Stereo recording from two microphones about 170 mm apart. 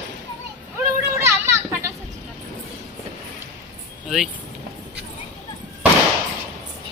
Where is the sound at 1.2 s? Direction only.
15° right (ahead or behind).